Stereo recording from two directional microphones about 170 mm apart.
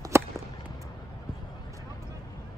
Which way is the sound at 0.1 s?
15° right (ahead or behind).